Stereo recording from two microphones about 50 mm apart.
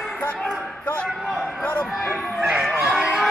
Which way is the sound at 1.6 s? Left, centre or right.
Left.